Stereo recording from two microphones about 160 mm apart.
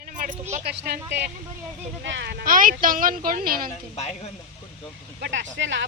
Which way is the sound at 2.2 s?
90° right.